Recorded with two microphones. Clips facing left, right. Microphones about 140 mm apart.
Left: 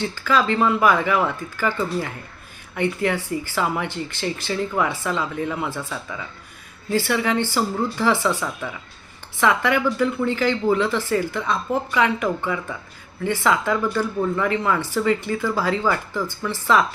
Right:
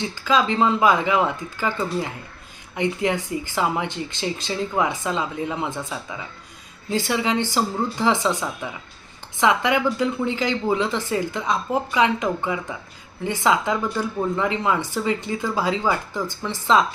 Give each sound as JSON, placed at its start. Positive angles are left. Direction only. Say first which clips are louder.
{"t": 0.0, "sound": "speech", "louder": "even", "side_deg": -15}